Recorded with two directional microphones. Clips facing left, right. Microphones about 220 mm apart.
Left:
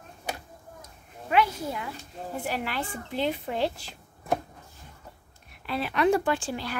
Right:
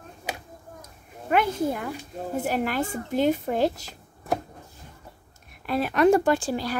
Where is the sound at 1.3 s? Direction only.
50° right (ahead or behind).